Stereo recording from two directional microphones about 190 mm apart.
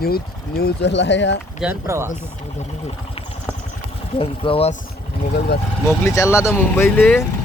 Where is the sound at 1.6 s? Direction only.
10° right (ahead or behind).